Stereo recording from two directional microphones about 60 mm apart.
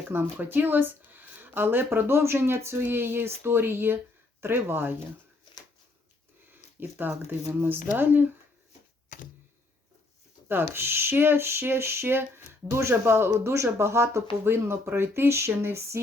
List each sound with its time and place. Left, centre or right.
0.1 s speech: right
6.8 s speech: right
10.5 s speech: right
13.4 s speech: right